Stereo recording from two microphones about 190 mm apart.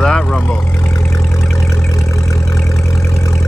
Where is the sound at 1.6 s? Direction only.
15° left (ahead or behind).